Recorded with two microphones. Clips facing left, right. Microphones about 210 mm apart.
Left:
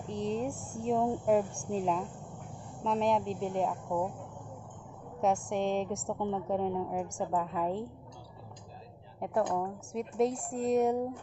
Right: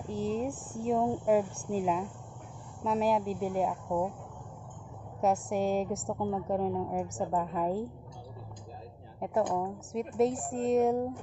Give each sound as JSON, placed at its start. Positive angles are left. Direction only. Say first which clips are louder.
{"t": 0.1, "sound": "a woman's voice", "louder": "right 1 dB", "side_deg": -5}
{"t": 5.2, "sound": "a woman's voice", "louder": "right 1 dB", "side_deg": -5}
{"t": 9.2, "sound": "a woman's voice", "louder": "right 1 dB", "side_deg": 0}